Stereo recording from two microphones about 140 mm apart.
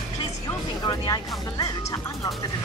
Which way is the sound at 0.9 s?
30° left (ahead or behind).